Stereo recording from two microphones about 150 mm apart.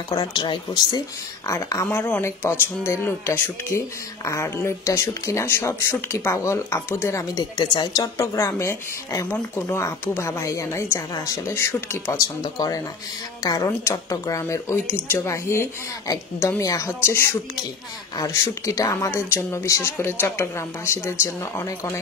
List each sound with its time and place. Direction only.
0.1 s a woman's voice: 30° left (ahead or behind)